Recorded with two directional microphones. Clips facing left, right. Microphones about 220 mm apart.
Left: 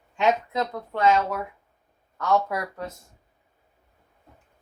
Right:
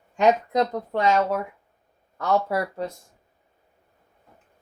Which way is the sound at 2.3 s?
25° right (ahead or behind).